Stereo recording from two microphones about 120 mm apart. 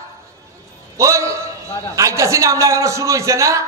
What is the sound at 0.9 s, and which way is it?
A man's voice, 25° right (ahead or behind).